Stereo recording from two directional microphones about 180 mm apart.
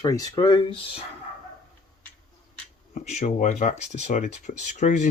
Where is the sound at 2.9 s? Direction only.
40° left (ahead or behind).